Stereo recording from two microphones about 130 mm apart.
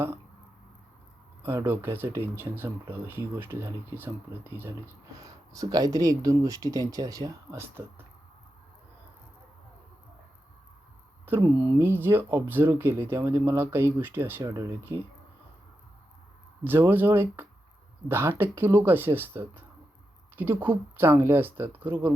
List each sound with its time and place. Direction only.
1.4 s speech: 20° right (ahead or behind)
5.2 s speech: 30° right (ahead or behind)
11.3 s speech: 15° right (ahead or behind)
16.6 s speech: 15° right (ahead or behind)